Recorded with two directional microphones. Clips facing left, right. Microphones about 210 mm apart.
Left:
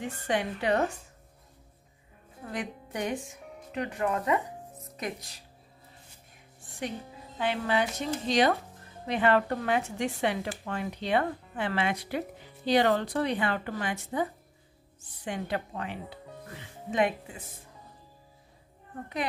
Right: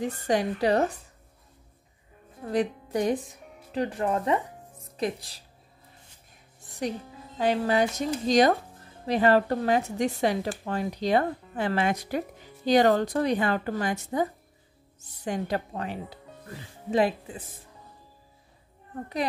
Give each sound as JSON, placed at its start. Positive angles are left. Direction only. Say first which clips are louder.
{"t": 0.0, "sound": "speech", "louder": "right 4 dB", "side_deg": -40}
{"t": 2.5, "sound": "speech", "louder": "right 9 dB", "side_deg": -35}
{"t": 7.3, "sound": "speech", "louder": "right 4 dB", "side_deg": -40}